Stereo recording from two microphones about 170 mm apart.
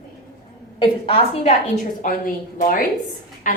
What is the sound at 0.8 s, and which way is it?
Speech, 35° left (ahead or behind).